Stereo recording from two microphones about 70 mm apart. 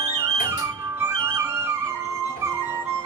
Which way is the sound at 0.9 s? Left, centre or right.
Right.